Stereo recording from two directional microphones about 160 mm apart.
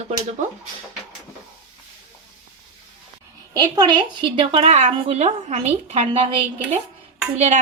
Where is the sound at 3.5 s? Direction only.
25° right (ahead or behind); by 6.2 s 45° right (ahead or behind).